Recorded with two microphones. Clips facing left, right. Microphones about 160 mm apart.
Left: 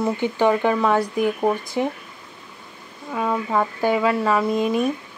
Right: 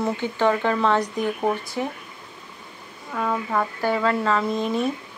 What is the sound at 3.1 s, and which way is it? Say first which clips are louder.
Speech: left 2 dB; 10° left (ahead or behind).